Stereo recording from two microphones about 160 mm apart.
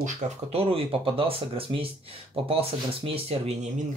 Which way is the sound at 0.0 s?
40° right (ahead or behind).